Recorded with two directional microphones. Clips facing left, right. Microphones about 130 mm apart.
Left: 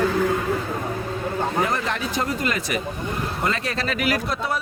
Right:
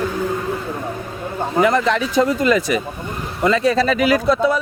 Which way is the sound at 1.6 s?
90° right.